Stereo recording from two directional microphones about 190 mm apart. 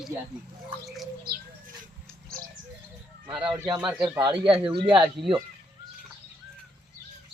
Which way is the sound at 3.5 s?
15° right (ahead or behind).